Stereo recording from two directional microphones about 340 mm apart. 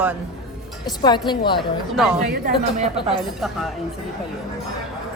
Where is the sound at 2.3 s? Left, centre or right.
Right.